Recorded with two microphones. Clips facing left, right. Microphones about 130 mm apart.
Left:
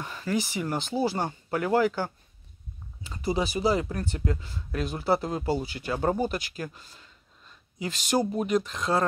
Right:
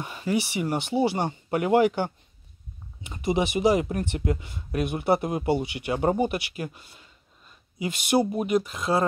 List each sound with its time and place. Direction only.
0.0 s speech: 15° right (ahead or behind)
3.3 s speech: 20° right (ahead or behind)